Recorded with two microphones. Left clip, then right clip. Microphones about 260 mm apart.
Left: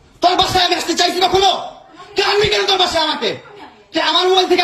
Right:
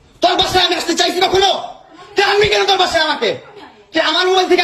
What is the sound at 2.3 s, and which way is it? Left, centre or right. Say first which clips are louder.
Speech: right 1 dB; left.